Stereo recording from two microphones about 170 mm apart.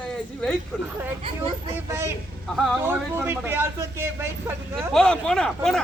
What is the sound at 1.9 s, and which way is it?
Speech, 15° right (ahead or behind).